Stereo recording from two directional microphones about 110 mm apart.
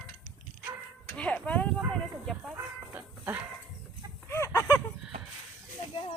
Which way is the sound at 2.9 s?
15° right (ahead or behind).